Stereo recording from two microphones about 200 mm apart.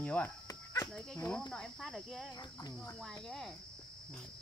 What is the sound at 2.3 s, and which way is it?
Speech, 20° left (ahead or behind).